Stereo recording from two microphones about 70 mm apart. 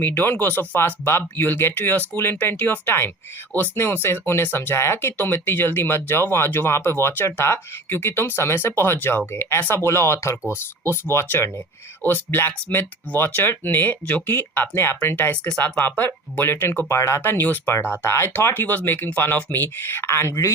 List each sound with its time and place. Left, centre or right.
0.0 s speech: left
20.1 s speech: left